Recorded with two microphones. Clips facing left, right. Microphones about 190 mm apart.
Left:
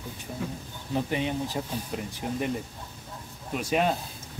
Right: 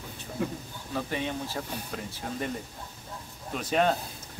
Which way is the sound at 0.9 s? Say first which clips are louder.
Left 4 dB; 15° left (ahead or behind).